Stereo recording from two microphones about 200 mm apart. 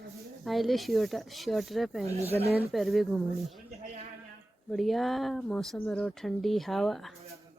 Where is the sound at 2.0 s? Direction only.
30° right (ahead or behind).